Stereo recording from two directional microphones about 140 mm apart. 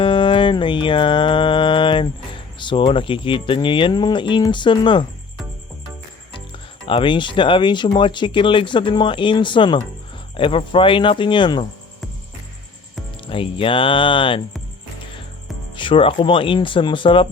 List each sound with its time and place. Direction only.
0.0 s mantra: 40° left (ahead or behind)
6.8 s speech: 35° left (ahead or behind)
13.2 s speech: 40° left (ahead or behind)
15.7 s speech: 35° left (ahead or behind)